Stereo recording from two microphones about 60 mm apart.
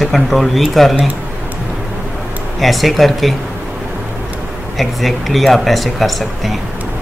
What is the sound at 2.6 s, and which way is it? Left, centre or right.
Speech, centre.